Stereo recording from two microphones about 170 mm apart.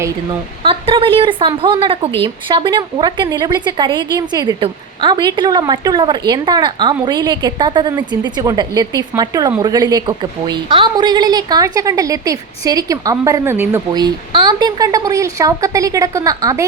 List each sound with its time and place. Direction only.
0.6 s a woman's voice: 30° right (ahead or behind)